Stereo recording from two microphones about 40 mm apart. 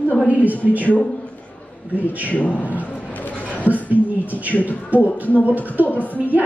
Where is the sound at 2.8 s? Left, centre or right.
Left.